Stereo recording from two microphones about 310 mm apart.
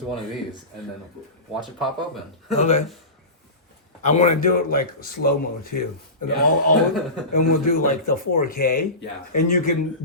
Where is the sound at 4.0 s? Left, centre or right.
Left.